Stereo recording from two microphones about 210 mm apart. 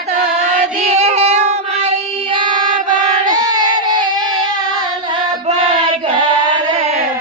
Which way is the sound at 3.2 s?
20° right (ahead or behind).